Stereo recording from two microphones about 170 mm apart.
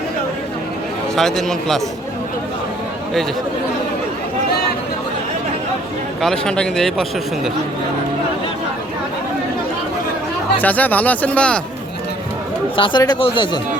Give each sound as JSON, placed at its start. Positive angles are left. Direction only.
{"t": 1.1, "sound": "speech", "side_deg": 0}
{"t": 6.2, "sound": "speech", "side_deg": 5}
{"t": 10.6, "sound": "speech", "side_deg": 10}
{"t": 12.7, "sound": "speech", "side_deg": 30}